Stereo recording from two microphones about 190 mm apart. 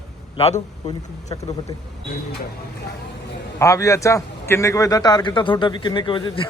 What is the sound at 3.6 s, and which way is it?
A man's voice, 15° left (ahead or behind).